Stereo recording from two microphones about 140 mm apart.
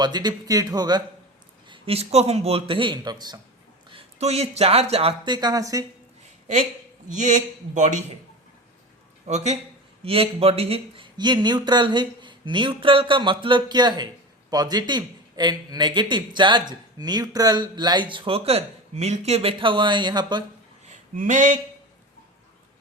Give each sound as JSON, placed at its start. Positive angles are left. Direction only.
{"t": 0.0, "sound": "speech", "side_deg": -30}
{"t": 1.6, "sound": "a man's voice", "side_deg": -40}
{"t": 3.9, "sound": "speech", "side_deg": -50}
{"t": 7.1, "sound": "a man's voice", "side_deg": -60}
{"t": 9.2, "sound": "a man's voice", "side_deg": -50}
{"t": 20.8, "sound": "a sound", "side_deg": -60}